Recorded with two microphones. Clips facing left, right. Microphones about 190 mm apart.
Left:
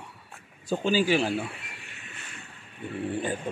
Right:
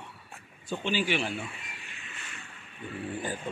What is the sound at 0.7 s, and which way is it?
Speech, 40° left (ahead or behind).